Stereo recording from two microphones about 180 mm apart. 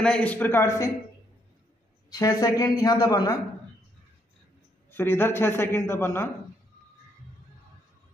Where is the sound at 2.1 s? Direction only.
20° left (ahead or behind).